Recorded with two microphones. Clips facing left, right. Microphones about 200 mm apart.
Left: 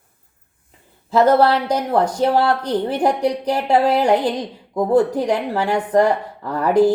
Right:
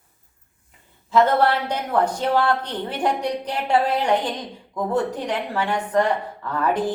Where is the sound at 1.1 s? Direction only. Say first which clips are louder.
Left 4 dB; 35° left (ahead or behind).